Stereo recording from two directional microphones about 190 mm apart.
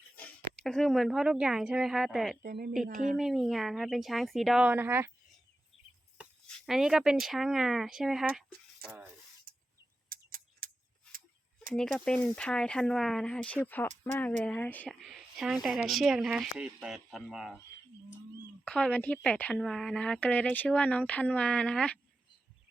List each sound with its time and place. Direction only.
0.6 s speech: centre (ahead or behind)
2.4 s speech: 55° right (ahead or behind)
3.2 s speech: centre (ahead or behind)
6.7 s speech: 5° right (ahead or behind)
9.5 s a sound: 50° right (ahead or behind)
10.1 s bird: 50° right (ahead or behind)
11.7 s speech: 5° left (ahead or behind)
15.0 s speech: centre (ahead or behind)
18.6 s speech: 5° left (ahead or behind)